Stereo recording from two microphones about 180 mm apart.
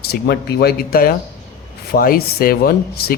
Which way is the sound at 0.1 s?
60° left (ahead or behind).